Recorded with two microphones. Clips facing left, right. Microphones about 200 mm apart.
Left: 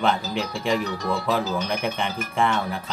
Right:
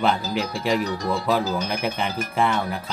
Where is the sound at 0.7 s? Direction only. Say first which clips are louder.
Right 1 dB; 35° right (ahead or behind).